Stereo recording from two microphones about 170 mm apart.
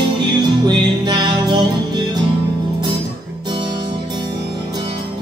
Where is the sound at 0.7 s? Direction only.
25° right (ahead or behind).